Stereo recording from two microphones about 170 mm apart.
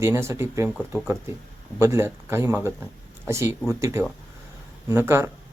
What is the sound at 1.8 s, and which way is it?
Speech, 15° right (ahead or behind).